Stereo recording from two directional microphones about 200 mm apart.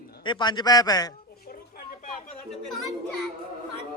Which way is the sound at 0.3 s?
20° left (ahead or behind).